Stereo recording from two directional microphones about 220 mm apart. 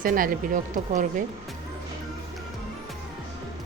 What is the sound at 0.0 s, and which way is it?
A woman's voice, 40° right (ahead or behind).